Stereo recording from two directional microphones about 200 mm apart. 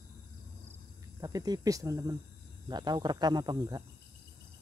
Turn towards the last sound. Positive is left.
turn(degrees=-20)  # may be behind; listen again after turning